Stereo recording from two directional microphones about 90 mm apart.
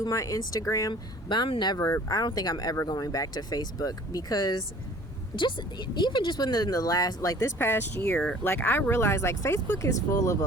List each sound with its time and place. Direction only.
0.0 s speech: 35° left (ahead or behind)
1.3 s speech: 60° left (ahead or behind)
1.9 s speech: 45° left (ahead or behind)
5.4 s speech: 60° left (ahead or behind); by 8.1 s 25° left (ahead or behind)
8.1 s speech: 10° left (ahead or behind)
8.4 s speech: 25° left (ahead or behind)